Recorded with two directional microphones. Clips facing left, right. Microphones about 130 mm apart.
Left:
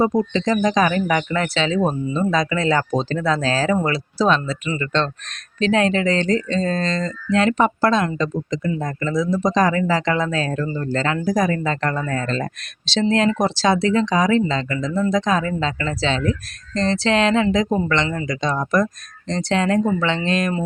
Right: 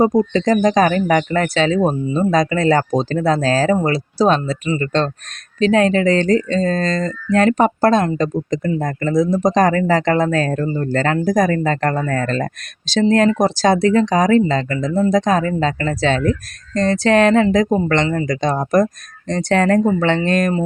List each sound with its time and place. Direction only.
0.3 s speech: 45° right (ahead or behind)